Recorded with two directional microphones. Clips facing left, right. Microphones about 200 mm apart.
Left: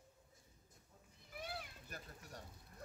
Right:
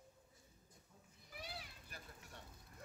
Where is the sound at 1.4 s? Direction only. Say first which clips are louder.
Left 4 dB; 50° left (ahead or behind).